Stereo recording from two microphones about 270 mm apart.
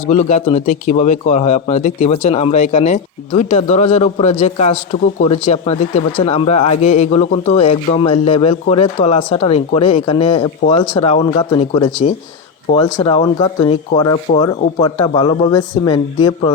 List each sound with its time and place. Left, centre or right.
0.1 s speech: left